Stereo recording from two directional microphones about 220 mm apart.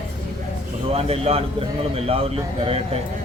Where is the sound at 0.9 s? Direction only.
25° right (ahead or behind).